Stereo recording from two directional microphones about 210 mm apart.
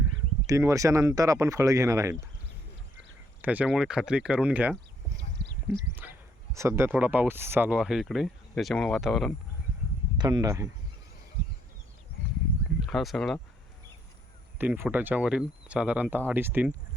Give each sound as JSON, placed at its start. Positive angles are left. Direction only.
{"t": 0.4, "sound": "speech", "side_deg": -15}
{"t": 3.4, "sound": "speech", "side_deg": -5}
{"t": 5.4, "sound": "a sound", "side_deg": -55}
{"t": 6.0, "sound": "speech", "side_deg": -10}
{"t": 10.2, "sound": "speech", "side_deg": -20}
{"t": 12.8, "sound": "speech", "side_deg": 0}
{"t": 14.6, "sound": "speech", "side_deg": -10}